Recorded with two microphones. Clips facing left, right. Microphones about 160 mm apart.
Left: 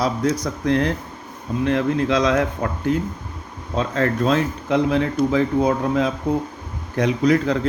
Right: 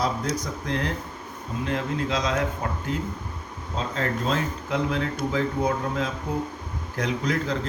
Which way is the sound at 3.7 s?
70° left (ahead or behind).